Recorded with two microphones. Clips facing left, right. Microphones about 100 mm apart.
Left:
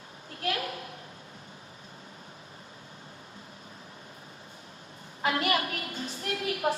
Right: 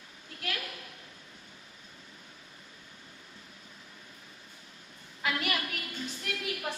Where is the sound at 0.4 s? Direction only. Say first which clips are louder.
Left 7 dB; 35° left (ahead or behind).